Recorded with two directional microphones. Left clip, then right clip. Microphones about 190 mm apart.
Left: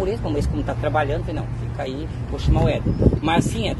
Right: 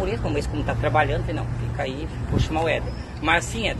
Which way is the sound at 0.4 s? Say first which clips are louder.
Left 1 dB; 30° left (ahead or behind).